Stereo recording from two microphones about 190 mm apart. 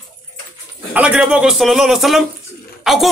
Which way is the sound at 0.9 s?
5° right (ahead or behind).